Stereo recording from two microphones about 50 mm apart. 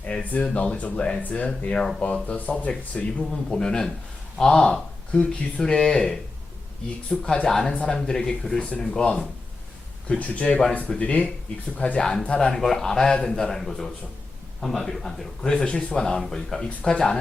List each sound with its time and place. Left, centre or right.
0.2 s speech: left
1.2 s speech: left
1.5 s speech: centre
3.2 s speech: centre
12.4 s speech: centre